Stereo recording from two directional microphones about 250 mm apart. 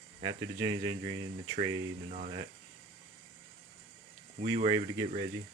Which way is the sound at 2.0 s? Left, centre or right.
Right.